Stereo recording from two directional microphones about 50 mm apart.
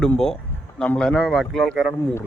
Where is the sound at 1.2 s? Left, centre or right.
Centre.